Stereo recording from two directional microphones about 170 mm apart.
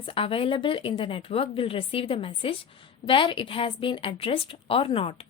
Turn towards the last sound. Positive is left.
turn(degrees=35)  # may be behind; listen again after turning